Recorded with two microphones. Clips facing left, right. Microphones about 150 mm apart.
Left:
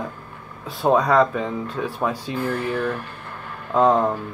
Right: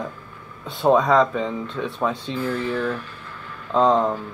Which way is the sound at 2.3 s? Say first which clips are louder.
Even; 60° left (ahead or behind).